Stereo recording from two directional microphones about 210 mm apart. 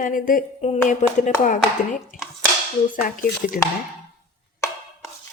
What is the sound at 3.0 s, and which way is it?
Speech, 40° left (ahead or behind).